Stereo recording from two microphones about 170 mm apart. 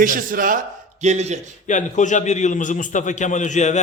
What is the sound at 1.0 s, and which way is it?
Speech, 40° right (ahead or behind).